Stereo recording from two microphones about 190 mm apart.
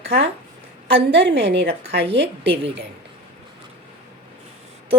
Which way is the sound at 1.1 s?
65° right (ahead or behind).